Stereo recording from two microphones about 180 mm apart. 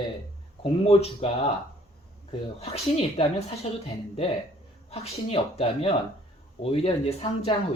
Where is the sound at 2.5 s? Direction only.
35° left (ahead or behind).